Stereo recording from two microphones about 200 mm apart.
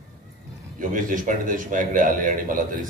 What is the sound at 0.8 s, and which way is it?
A man's voice, 40° right (ahead or behind).